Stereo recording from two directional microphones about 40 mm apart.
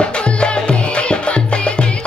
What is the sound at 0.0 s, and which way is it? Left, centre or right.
Music, left.